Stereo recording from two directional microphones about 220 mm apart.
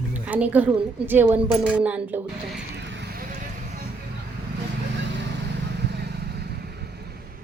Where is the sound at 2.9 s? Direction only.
50° right (ahead or behind).